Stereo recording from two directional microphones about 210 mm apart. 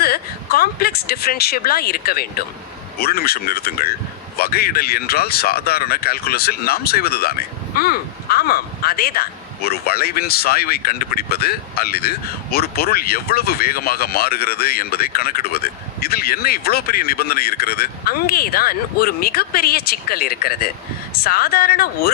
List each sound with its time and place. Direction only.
0.0 s speech: 45° left (ahead or behind)